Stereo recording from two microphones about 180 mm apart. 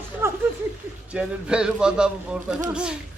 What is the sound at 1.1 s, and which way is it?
A man's voice, 5° right (ahead or behind).